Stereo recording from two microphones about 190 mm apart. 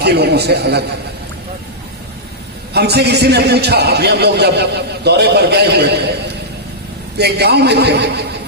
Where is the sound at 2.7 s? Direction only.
60° right (ahead or behind).